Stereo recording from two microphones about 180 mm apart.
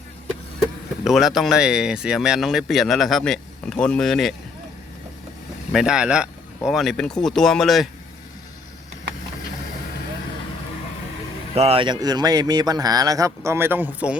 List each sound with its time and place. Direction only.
1.0 s speech: centre (ahead or behind)
5.7 s speech: 5° right (ahead or behind)
11.5 s speech: 35° right (ahead or behind); by 14.2 s 10° right (ahead or behind)